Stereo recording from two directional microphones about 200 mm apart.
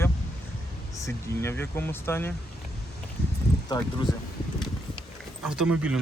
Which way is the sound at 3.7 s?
20° left (ahead or behind).